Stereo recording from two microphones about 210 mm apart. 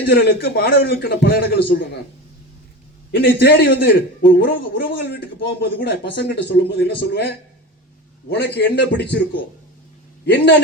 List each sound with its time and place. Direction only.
0.0 s a man's voice: 50° left (ahead or behind)
3.1 s a man's voice: 55° left (ahead or behind)